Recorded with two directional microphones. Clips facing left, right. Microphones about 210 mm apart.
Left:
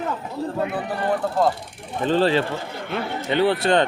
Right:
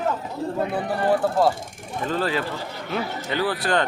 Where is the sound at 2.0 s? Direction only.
30° left (ahead or behind).